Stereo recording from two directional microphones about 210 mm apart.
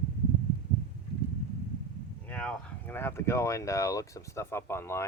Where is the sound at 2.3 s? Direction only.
5° left (ahead or behind).